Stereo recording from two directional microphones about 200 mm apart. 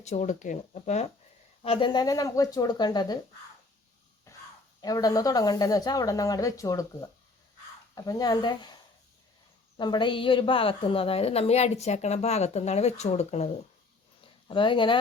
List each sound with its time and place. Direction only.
0.0 s a woman's voice: 35° left (ahead or behind)
4.3 s a sound: 15° left (ahead or behind)
4.8 s a woman's voice: 20° left (ahead or behind)